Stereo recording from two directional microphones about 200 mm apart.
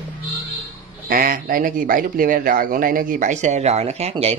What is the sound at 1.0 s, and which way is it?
Speech, 45° right (ahead or behind).